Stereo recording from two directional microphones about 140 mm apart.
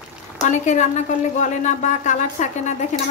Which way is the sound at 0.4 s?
60° left (ahead or behind).